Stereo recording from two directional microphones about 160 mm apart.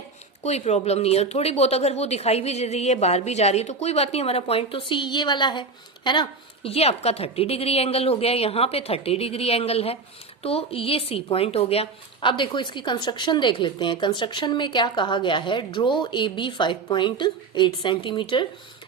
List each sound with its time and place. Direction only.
0.4 s speech: 45° left (ahead or behind)